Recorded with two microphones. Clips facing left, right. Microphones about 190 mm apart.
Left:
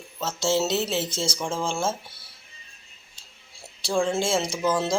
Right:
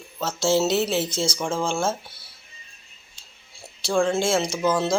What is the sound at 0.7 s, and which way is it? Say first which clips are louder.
Speech: right 3 dB; 25° left (ahead or behind).